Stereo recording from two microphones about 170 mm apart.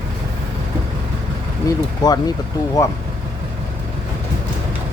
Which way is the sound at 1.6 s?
25° left (ahead or behind).